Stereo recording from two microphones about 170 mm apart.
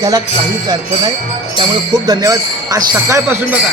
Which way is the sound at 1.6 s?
20° right (ahead or behind).